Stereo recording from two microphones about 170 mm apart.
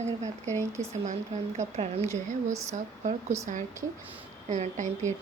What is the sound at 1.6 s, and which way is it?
Speech, 35° right (ahead or behind).